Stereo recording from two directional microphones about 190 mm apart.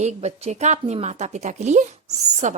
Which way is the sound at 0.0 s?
35° right (ahead or behind).